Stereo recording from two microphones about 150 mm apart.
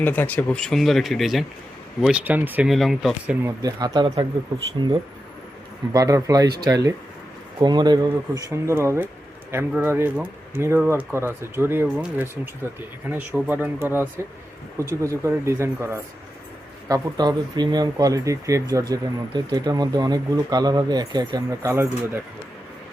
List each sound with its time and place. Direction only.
0.0 s speech: 10° left (ahead or behind); by 2.6 s 10° right (ahead or behind)
2.6 s speech: centre (ahead or behind)
3.4 s speech: 25° right (ahead or behind)
5.9 s speech: 25° right (ahead or behind)
16.9 s speech: 25° right (ahead or behind)